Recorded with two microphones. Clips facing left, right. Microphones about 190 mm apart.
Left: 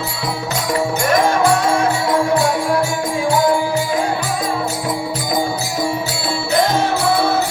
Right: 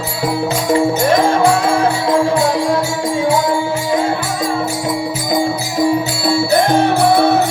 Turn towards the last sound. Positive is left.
turn(degrees=-60)  # may be behind; listen again after turning